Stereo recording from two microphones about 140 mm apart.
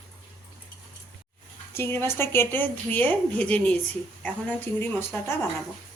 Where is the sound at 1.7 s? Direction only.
15° left (ahead or behind).